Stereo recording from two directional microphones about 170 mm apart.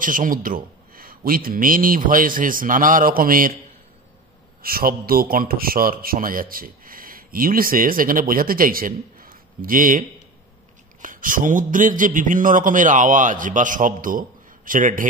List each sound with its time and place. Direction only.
0.0 s a man's voice: 50° right (ahead or behind)
4.6 s a man's voice: 60° right (ahead or behind)